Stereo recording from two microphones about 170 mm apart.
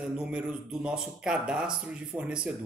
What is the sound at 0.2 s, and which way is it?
A man's voice, 5° right (ahead or behind).